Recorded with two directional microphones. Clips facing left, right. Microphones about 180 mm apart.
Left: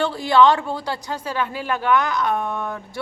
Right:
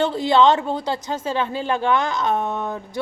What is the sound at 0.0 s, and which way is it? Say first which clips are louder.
A woman's voice: even; 20° right (ahead or behind).